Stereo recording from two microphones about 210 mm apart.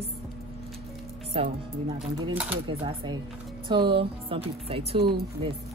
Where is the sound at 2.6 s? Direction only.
20° right (ahead or behind).